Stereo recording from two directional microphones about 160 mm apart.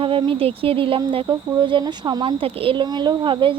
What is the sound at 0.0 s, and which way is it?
Speech, 35° right (ahead or behind).